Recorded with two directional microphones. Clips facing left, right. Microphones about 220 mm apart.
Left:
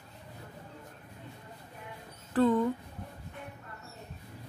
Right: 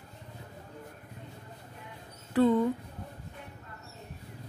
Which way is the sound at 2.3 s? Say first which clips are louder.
Right 2 dB; 10° right (ahead or behind).